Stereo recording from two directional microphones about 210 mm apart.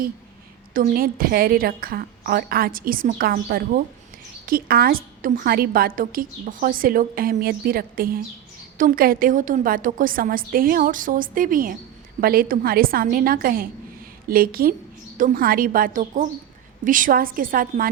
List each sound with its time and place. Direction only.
0.7 s a woman's voice: 40° right (ahead or behind)